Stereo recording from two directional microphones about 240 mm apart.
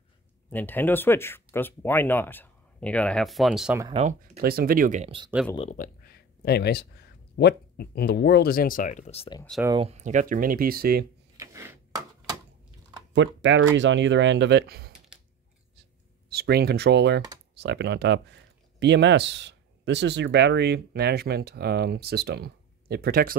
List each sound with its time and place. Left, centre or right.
0.5 s speech: centre
3.9 s speech: right
5.5 s speech: left
9.8 s speech: right
11.3 s wood: centre
13.1 s speech: right
16.3 s speech: right